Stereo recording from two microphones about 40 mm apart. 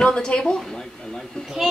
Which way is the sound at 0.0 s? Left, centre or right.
Centre.